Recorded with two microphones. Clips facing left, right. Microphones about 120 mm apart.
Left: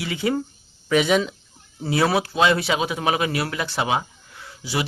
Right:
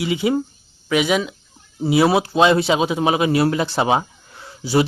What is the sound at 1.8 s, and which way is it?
A man's voice, 15° right (ahead or behind).